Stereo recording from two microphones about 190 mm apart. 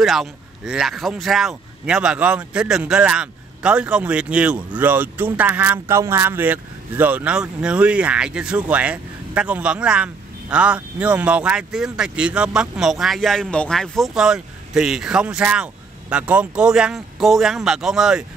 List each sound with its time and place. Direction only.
0.0 s speech: centre (ahead or behind)